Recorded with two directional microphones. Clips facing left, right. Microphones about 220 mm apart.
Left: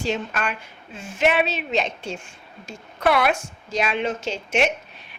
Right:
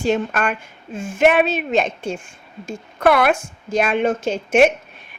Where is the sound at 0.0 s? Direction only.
50° right (ahead or behind).